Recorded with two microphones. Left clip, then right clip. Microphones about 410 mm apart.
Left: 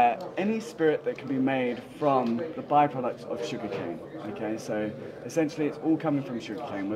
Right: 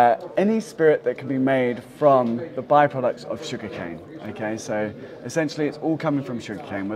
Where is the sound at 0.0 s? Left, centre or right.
Right.